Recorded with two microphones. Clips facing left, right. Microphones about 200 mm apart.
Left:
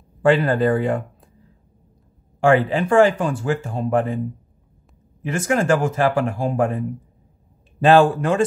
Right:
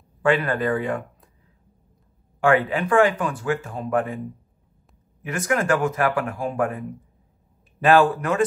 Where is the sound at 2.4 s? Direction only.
30° left (ahead or behind).